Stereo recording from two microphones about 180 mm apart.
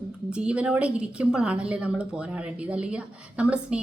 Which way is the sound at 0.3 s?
5° right (ahead or behind).